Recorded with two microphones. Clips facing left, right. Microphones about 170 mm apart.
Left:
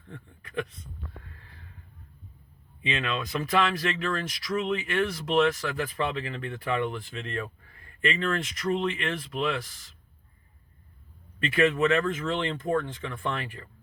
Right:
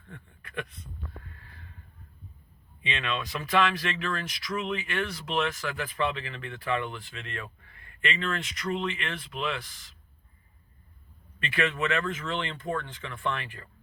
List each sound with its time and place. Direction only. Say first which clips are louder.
2.8 s speech: left 2 dB; 35° left (ahead or behind)
11.4 s speech: left 6 dB; 35° left (ahead or behind)